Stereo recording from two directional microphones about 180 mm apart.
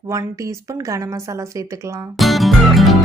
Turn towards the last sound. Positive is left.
turn(degrees=0)  # may be behind; listen again after turning